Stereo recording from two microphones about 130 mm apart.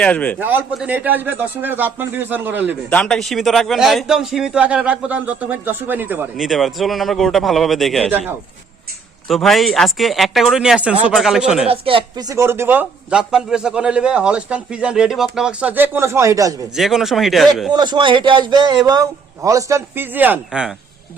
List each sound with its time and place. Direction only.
0.0 s a man's voice: 10° left (ahead or behind)
0.3 s a man's voice: 15° right (ahead or behind)
2.9 s a man's voice: 5° left (ahead or behind); by 6.2 s 15° right (ahead or behind)
6.3 s a man's voice: centre (ahead or behind)
9.2 s a man's voice: centre (ahead or behind)
11.7 s speech: 45° right (ahead or behind)
12.2 s a man's voice: 20° right (ahead or behind)
16.7 s a man's voice: 5° right (ahead or behind)
17.7 s a man's voice: 35° right (ahead or behind); by 20.7 s 5° right (ahead or behind)